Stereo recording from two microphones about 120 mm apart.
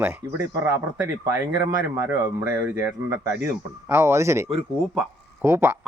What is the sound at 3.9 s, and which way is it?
Speech, 20° right (ahead or behind).